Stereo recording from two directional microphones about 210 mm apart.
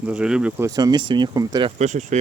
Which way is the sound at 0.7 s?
20° right (ahead or behind).